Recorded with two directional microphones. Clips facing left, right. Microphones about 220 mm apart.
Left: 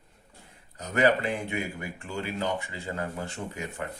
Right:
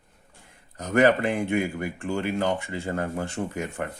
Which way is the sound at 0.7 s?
50° right (ahead or behind).